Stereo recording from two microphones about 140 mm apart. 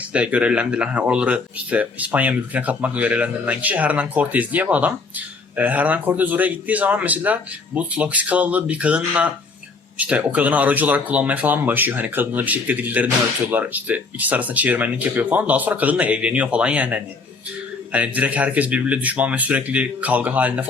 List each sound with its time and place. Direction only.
0.1 s speech: 10° right (ahead or behind)